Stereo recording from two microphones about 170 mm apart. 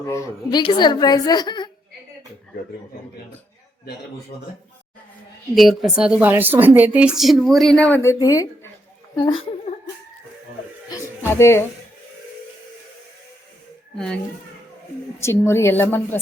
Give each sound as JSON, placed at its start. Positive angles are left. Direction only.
{"t": 0.1, "sound": "a woman's voice", "side_deg": 20}
{"t": 5.5, "sound": "a woman's voice", "side_deg": 0}
{"t": 11.3, "sound": "speech", "side_deg": 15}
{"t": 13.9, "sound": "a child's voice", "side_deg": 5}
{"t": 15.2, "sound": "speech", "side_deg": 15}